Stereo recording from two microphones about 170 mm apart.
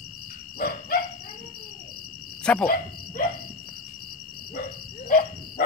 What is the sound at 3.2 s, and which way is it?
Insect, 55° left (ahead or behind).